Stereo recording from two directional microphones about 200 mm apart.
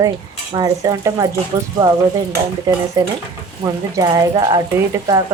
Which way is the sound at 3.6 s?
15° right (ahead or behind).